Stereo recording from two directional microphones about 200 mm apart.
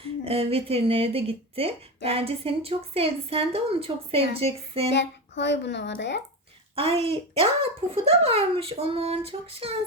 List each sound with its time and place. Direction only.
0.3 s a child's voice: 30° right (ahead or behind)
4.9 s speech: 60° left (ahead or behind)
6.7 s a child's voice: 30° right (ahead or behind)